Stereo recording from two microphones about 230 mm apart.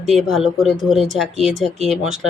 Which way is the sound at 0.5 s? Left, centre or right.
Centre.